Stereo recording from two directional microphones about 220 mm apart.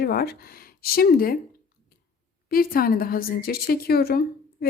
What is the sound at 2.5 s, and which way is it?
A woman's voice, 40° left (ahead or behind).